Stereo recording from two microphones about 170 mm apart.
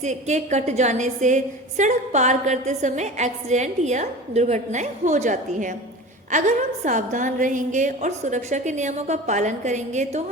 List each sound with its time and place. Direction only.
0.0 s a woman's voice: 45° right (ahead or behind)
6.8 s a woman's voice: 50° right (ahead or behind)